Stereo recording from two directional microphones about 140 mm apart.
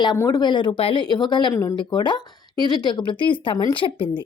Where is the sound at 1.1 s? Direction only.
30° left (ahead or behind).